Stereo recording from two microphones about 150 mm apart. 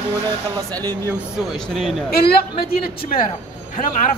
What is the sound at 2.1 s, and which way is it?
A woman's voice, 85° left.